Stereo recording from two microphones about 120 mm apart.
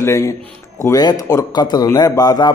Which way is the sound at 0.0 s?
25° left (ahead or behind).